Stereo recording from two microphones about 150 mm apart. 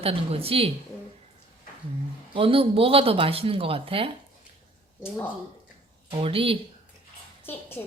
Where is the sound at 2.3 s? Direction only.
35° right (ahead or behind).